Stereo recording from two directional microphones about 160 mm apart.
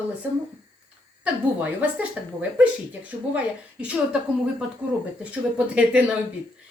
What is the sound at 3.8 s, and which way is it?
Speech, 5° right (ahead or behind).